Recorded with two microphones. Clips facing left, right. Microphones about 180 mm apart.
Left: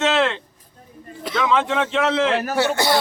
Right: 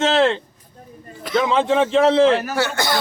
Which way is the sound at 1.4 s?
30° right (ahead or behind).